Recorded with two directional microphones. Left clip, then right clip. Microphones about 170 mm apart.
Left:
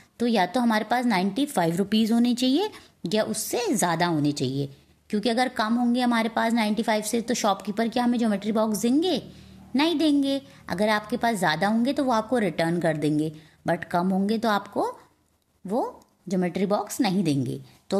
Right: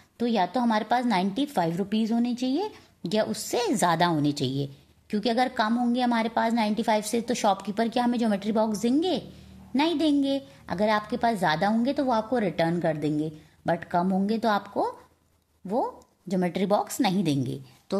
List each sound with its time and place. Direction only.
0.2 s a woman's voice: 20° left (ahead or behind)
3.0 s a woman's voice: 5° left (ahead or behind)